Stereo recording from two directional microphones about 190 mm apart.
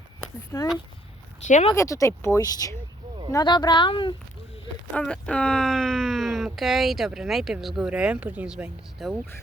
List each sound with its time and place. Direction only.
0.5 s speech: 15° left (ahead or behind)
1.5 s speech: 40° left (ahead or behind)
1.7 s speech: 15° left (ahead or behind)
4.9 s speech: 5° left (ahead or behind)